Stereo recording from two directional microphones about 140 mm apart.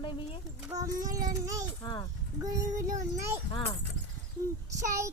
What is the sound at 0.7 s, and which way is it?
Child singing, 25° right (ahead or behind).